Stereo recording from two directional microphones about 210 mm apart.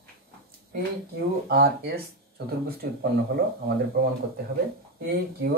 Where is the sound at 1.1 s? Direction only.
50° right (ahead or behind).